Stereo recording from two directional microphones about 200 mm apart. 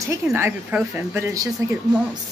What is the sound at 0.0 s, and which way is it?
Speech, 15° right (ahead or behind).